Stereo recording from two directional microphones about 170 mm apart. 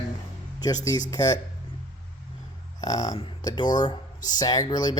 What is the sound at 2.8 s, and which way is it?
Speech, 20° left (ahead or behind).